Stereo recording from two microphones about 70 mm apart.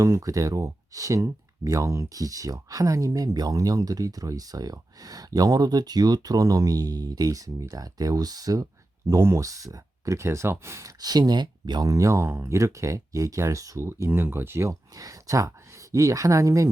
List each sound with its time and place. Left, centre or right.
0.0 s speech: right
9.0 s speech: right
11.0 s speech: right
14.1 s speech: right
14.7 s speech: right